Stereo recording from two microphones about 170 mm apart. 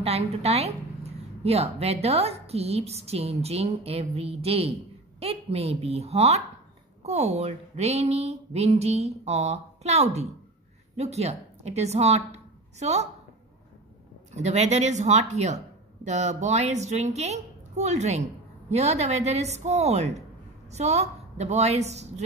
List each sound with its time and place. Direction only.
0.0 s a woman's voice: 35° right (ahead or behind)
14.3 s a woman's voice: 40° right (ahead or behind)